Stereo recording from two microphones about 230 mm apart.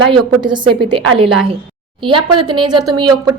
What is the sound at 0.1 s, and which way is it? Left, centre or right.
A woman's voice, centre.